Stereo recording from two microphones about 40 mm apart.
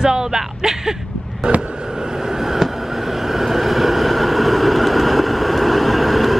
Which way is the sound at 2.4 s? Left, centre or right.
Centre.